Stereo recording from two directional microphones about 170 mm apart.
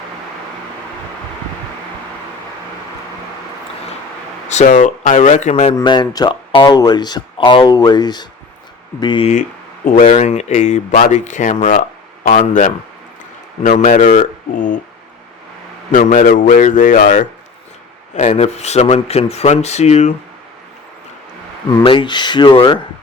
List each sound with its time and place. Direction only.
4.4 s speech: 45° left (ahead or behind)
5.7 s speech: 25° left (ahead or behind)
9.8 s speech: 50° left (ahead or behind)
15.9 s speech: 50° left (ahead or behind)
21.7 s speech: 25° left (ahead or behind)